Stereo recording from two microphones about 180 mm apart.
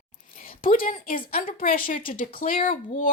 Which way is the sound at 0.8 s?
50° left (ahead or behind).